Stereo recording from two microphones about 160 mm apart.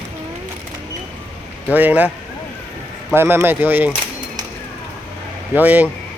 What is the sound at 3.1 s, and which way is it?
Speech, 15° right (ahead or behind).